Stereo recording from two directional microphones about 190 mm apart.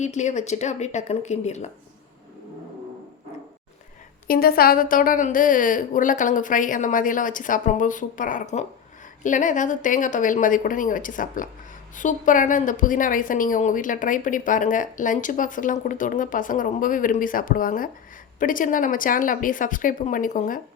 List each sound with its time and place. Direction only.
0.0 s speech: 40° left (ahead or behind)
4.3 s a woman's voice: 50° left (ahead or behind)